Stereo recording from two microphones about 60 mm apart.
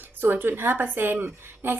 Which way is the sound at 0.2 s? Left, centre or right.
Right.